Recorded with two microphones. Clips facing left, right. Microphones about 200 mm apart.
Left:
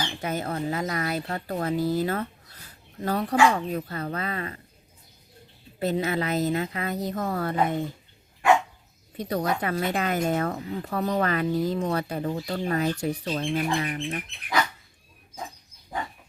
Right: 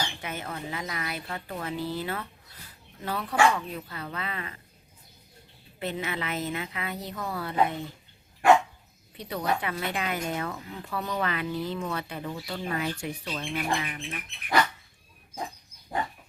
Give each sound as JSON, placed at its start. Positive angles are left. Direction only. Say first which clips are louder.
{"t": 0.2, "sound": "speech", "louder": "left 7 dB", "side_deg": 40}
{"t": 5.8, "sound": "speech", "louder": "left 7 dB", "side_deg": 40}
{"t": 9.1, "sound": "speech", "louder": "left 3 dB", "side_deg": 45}